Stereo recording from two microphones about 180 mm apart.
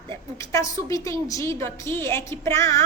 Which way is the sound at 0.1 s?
15° left (ahead or behind).